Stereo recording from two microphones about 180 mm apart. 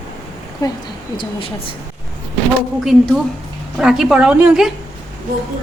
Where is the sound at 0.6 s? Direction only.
20° left (ahead or behind).